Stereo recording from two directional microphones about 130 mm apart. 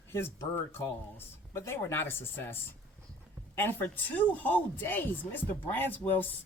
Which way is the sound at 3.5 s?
15° left (ahead or behind).